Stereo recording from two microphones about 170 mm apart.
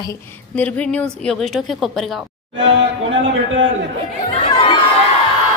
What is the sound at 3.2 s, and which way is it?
Speech, 90° right.